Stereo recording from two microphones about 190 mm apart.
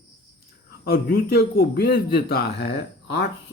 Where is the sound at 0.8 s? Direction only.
55° left (ahead or behind).